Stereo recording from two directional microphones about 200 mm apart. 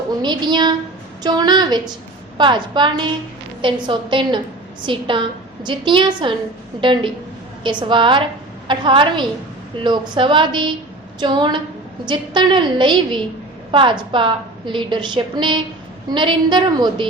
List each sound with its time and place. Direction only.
0.1 s a woman's voice: 20° right (ahead or behind)